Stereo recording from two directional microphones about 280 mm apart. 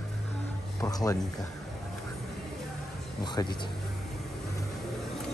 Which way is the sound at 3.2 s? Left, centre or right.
Centre.